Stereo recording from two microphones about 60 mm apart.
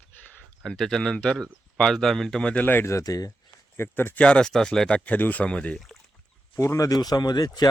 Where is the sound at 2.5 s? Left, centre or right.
Left.